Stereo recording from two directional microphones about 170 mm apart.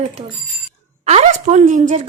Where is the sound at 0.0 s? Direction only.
35° right (ahead or behind).